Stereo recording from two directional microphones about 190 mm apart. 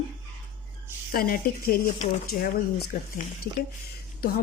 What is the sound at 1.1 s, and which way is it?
A woman's voice, 50° left (ahead or behind).